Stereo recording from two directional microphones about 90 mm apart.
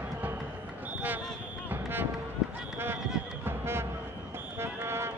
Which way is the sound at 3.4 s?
25° right (ahead or behind).